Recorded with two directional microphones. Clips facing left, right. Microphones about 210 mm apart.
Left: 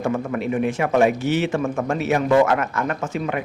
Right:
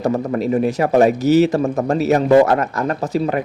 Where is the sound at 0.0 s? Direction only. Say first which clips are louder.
Right 4 dB; 35° right (ahead or behind).